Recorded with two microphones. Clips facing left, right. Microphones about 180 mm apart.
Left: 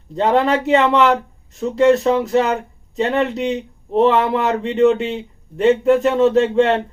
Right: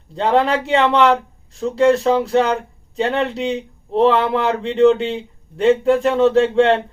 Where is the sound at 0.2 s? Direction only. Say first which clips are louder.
Left 1 dB; centre (ahead or behind).